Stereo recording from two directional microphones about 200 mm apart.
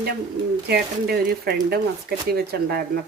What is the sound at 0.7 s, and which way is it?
A woman's voice, 50° right (ahead or behind).